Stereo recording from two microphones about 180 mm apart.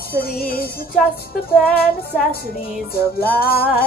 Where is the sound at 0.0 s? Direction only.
60° left (ahead or behind).